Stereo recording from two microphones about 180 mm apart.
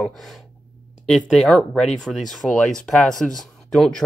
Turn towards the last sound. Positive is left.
turn(degrees=5)  # may be behind; listen again after turning